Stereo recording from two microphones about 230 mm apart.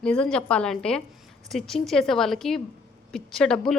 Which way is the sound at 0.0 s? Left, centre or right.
Centre.